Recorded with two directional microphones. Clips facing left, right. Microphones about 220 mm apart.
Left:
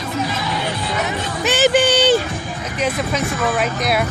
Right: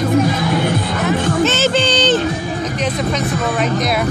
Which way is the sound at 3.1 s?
5° left (ahead or behind).